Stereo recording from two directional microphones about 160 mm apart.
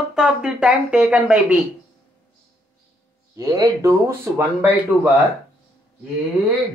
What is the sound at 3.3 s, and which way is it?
Speech, 20° right (ahead or behind).